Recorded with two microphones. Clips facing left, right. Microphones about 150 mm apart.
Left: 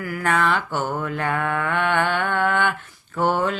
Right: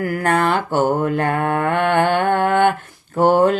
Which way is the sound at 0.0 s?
45° right (ahead or behind).